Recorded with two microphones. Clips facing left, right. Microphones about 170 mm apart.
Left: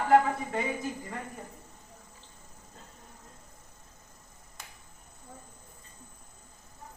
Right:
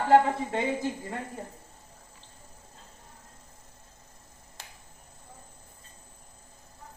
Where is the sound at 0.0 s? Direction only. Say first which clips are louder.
Right 2 dB; 30° right (ahead or behind).